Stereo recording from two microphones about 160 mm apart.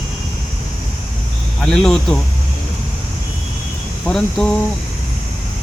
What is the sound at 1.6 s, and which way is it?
Speech, 5° left (ahead or behind).